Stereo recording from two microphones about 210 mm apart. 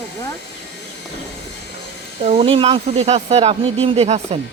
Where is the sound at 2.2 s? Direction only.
30° right (ahead or behind).